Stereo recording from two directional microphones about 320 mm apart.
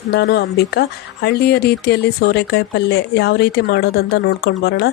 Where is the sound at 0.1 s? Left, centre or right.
Left.